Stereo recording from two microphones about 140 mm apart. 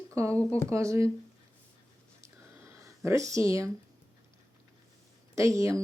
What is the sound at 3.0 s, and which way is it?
Speech, 20° right (ahead or behind).